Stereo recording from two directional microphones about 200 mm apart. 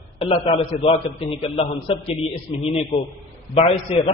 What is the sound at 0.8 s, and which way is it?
A man's voice, 30° left (ahead or behind).